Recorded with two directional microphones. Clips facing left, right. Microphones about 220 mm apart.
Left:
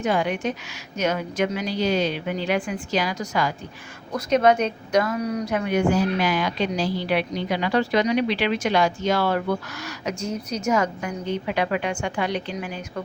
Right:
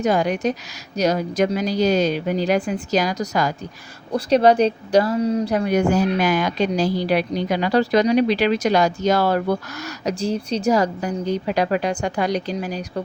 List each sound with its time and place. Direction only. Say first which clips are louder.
0.0 s speech: right 4 dB; 40° right (ahead or behind)